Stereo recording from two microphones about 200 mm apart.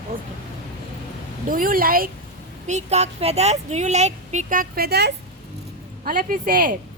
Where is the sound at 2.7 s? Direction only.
35° right (ahead or behind).